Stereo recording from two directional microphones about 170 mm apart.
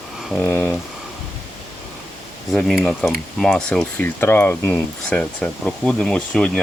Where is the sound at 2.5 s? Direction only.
5° left (ahead or behind).